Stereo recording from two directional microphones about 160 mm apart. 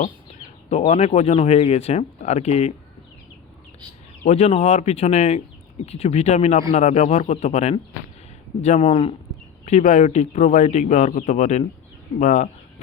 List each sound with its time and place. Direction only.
0.7 s speech: 40° left (ahead or behind)
4.2 s speech: 45° left (ahead or behind)